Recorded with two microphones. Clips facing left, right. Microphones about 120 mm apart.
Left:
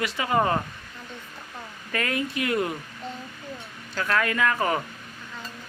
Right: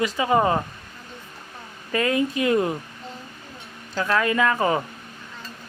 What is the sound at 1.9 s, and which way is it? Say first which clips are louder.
Speech: right 6 dB; 25° right (ahead or behind).